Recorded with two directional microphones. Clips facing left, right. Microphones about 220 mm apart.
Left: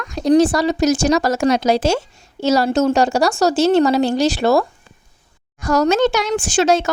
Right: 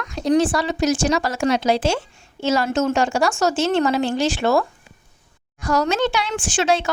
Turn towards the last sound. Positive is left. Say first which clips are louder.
# left 4 dB
turn(degrees=40)  # may be behind; listen again after turning